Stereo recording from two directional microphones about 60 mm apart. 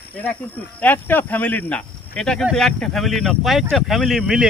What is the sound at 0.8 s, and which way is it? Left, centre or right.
Speech, left.